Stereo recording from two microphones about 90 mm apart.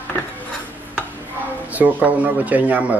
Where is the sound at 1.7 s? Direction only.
15° right (ahead or behind).